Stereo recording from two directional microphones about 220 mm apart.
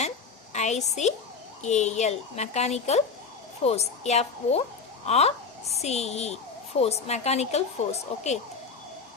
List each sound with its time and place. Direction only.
0.5 s a woman's voice: 30° left (ahead or behind)